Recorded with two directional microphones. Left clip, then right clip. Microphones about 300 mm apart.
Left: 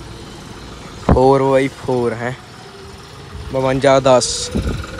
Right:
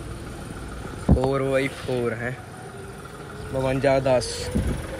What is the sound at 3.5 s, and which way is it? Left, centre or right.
Speech, centre.